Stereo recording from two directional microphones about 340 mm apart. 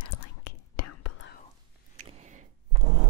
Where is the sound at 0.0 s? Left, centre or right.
Left.